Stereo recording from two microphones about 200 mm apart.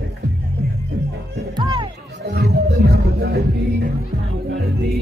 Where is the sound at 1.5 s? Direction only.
20° right (ahead or behind).